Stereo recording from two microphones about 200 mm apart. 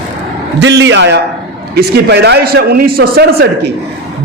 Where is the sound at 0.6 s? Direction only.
65° right (ahead or behind).